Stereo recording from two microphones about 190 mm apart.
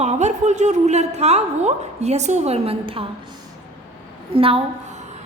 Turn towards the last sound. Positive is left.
turn(degrees=-30)  # may be behind; listen again after turning